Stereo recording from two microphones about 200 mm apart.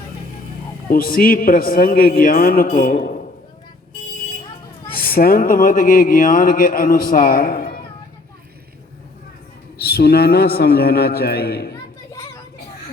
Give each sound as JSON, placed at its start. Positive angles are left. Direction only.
{"t": 0.9, "sound": "speech", "side_deg": 45}
{"t": 4.9, "sound": "speech", "side_deg": 45}
{"t": 9.8, "sound": "speech", "side_deg": 50}